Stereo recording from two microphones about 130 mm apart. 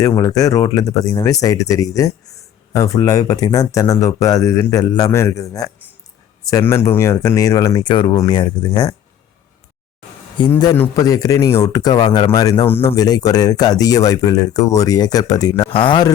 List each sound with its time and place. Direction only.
0.0 s speech: 25° left (ahead or behind)
10.4 s speech: 35° left (ahead or behind)